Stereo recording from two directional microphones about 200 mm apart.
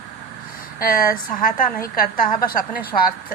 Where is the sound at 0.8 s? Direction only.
45° left (ahead or behind).